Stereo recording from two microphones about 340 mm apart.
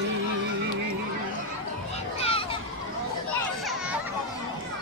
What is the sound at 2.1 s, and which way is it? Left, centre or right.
Children playing, centre.